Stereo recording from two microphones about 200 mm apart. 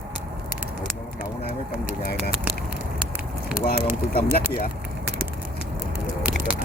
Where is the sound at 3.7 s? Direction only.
50° left (ahead or behind).